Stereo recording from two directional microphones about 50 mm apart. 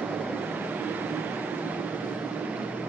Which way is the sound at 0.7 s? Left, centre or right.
Right.